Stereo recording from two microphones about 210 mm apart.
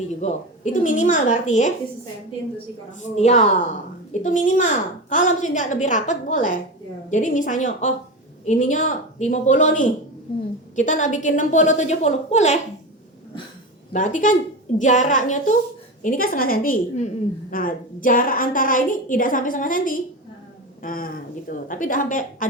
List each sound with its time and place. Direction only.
0.2 s a woman's voice: 35° left (ahead or behind)
3.0 s a woman's voice: 35° left (ahead or behind)
13.9 s a woman's voice: 35° left (ahead or behind)